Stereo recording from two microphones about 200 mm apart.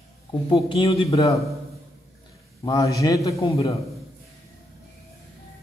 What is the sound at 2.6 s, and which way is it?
Speech, 20° left (ahead or behind).